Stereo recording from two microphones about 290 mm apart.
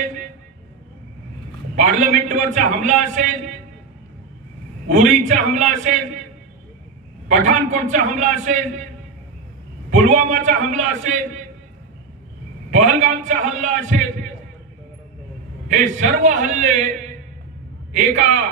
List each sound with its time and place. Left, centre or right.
1.8 s a man's voice: right
4.8 s a man's voice: right
7.2 s a man's voice: right
9.8 s a man's voice: right
12.7 s a man's voice: right
15.7 s a man's voice: right
17.9 s a man's voice: right